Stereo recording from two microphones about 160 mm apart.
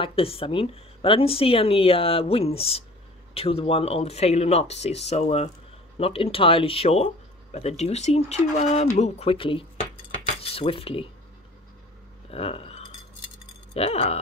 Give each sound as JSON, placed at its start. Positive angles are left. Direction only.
{"t": 0.0, "sound": "speech", "side_deg": 35}
{"t": 10.4, "sound": "cutlery", "side_deg": 35}
{"t": 12.3, "sound": "a sound", "side_deg": 40}